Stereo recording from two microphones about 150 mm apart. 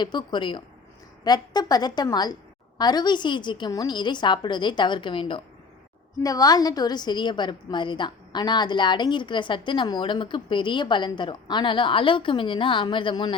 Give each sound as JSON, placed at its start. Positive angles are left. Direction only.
{"t": 0.0, "sound": "a woman's voice", "side_deg": 30}